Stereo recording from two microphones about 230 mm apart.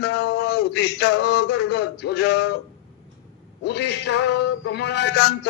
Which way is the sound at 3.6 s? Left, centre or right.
Left.